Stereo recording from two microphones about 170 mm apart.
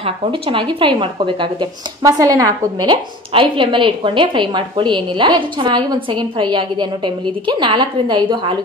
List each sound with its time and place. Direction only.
0.0 s speech: 30° right (ahead or behind)